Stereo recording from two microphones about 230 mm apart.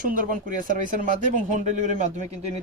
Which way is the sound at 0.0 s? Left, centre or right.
Right.